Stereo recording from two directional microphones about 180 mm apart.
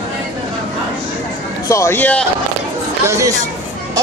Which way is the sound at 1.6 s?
15° left (ahead or behind).